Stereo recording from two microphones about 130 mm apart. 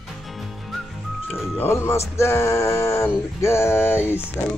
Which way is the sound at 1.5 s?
20° left (ahead or behind).